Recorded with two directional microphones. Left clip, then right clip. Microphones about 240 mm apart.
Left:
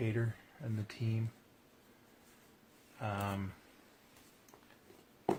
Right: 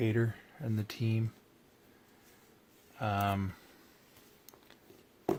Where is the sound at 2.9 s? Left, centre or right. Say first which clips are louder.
Right 7 dB; right.